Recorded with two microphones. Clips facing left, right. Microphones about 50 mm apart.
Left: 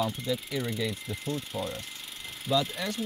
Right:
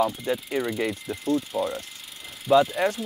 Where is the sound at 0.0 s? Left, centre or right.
Centre.